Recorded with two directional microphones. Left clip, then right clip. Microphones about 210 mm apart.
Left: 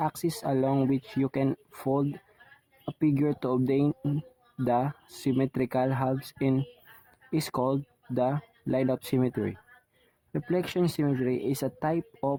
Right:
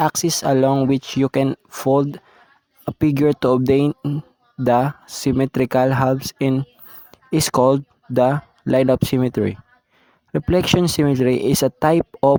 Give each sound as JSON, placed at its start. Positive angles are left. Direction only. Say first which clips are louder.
{"t": 0.0, "sound": "speech", "louder": "right 11 dB", "side_deg": -40}